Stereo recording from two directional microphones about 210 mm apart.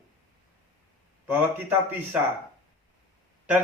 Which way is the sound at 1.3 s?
10° right (ahead or behind).